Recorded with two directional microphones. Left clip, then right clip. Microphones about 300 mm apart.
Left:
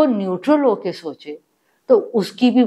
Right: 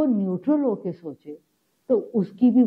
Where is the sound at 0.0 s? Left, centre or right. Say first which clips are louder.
Left 7 dB; centre.